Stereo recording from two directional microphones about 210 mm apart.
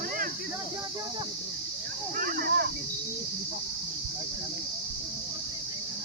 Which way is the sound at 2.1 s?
40° right (ahead or behind).